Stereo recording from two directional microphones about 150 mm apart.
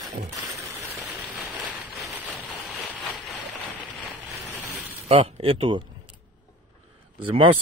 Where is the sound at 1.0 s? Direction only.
Centre (ahead or behind).